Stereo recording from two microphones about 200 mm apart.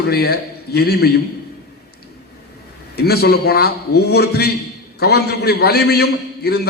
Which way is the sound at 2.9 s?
50° left (ahead or behind).